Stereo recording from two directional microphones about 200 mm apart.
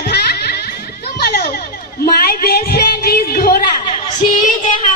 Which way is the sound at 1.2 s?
50° left (ahead or behind).